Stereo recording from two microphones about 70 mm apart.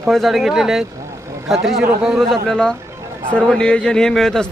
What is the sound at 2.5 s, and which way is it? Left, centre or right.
A man's voice, centre.